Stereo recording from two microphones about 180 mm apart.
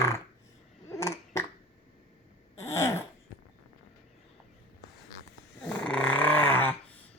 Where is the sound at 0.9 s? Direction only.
15° left (ahead or behind).